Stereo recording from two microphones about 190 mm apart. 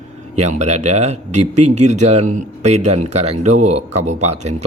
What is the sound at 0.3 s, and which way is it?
Speech, 35° right (ahead or behind).